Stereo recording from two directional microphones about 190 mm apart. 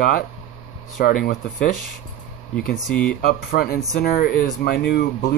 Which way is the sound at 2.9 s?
5° left (ahead or behind).